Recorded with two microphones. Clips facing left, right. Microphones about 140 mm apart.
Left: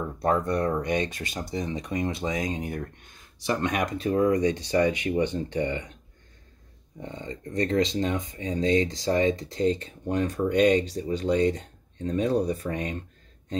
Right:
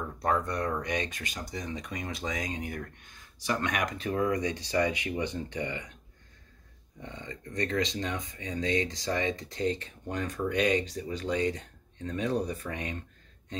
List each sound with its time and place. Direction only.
0.0 s speech: 30° left (ahead or behind)
7.0 s speech: 35° left (ahead or behind)